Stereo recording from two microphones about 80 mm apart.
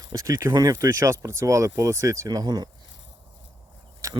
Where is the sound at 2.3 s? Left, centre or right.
Right.